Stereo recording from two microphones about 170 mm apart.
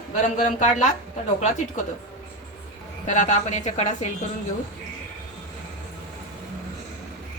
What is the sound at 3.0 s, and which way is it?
Speech, 45° left (ahead or behind).